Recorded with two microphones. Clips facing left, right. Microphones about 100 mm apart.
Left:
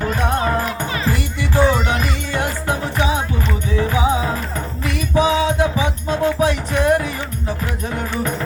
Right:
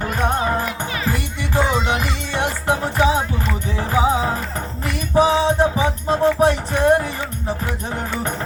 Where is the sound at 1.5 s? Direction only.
20° right (ahead or behind).